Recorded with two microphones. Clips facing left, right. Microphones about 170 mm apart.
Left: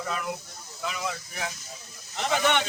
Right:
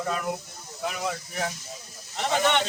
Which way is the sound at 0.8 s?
50° right (ahead or behind).